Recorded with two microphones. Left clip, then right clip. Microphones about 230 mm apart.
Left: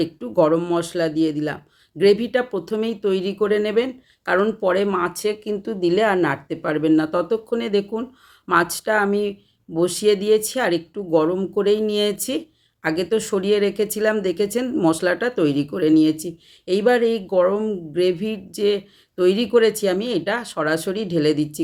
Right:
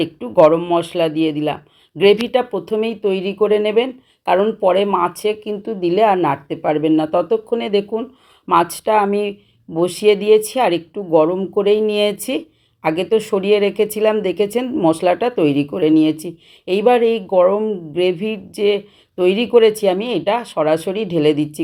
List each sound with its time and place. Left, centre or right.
0.0 s speech: centre
0.6 s speech: left
2.3 s speech: centre
6.5 s speech: left
6.8 s speech: centre
15.4 s speech: left
15.8 s speech: centre